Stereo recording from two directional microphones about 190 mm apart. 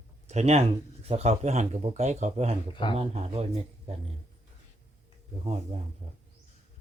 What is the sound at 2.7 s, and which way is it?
Speech, 25° left (ahead or behind).